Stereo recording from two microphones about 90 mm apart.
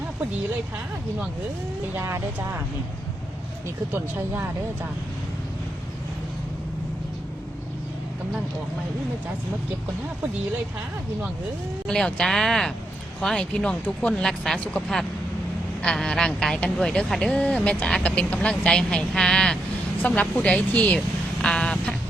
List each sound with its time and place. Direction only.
2.0 s speech: 30° right (ahead or behind)
11.9 s speech: 5° left (ahead or behind)
20.0 s speech: 20° left (ahead or behind)